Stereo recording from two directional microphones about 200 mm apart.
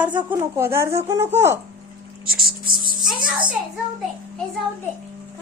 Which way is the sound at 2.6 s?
45° right (ahead or behind).